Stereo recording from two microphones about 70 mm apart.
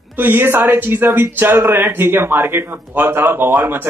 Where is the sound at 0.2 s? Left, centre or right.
Right.